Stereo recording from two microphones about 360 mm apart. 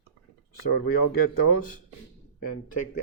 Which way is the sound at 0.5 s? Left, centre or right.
Left.